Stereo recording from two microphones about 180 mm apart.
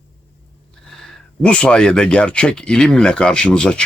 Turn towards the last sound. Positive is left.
turn(degrees=5)  # may be behind; listen again after turning